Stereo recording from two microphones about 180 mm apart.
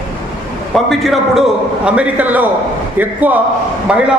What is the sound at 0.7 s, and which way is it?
A man's voice, centre (ahead or behind).